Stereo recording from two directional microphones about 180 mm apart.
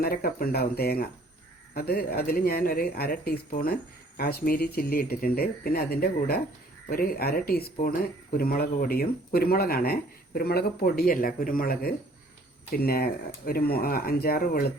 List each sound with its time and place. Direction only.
0.0 s speech: 55° left (ahead or behind)